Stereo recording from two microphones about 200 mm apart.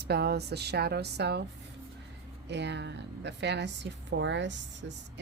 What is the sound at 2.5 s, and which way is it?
A woman's voice, 60° right (ahead or behind).